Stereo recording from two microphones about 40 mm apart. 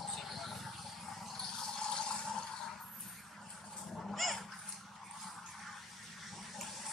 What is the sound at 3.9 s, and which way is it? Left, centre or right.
Dog, centre.